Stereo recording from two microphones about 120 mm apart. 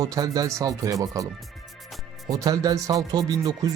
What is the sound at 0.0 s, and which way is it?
Speech, 30° right (ahead or behind).